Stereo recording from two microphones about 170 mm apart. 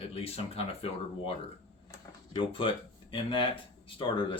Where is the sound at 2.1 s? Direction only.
30° left (ahead or behind).